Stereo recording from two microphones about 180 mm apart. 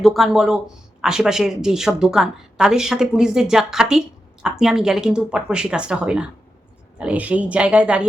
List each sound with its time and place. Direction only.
0.0 s a woman's voice: centre (ahead or behind)